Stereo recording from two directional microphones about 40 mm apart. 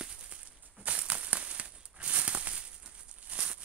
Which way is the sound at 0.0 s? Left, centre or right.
Right.